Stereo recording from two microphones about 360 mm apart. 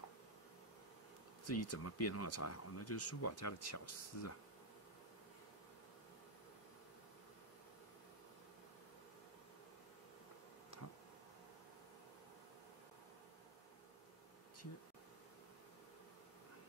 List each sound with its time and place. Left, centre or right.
1.5 s speech: left